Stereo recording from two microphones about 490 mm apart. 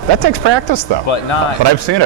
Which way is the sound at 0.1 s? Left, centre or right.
Right.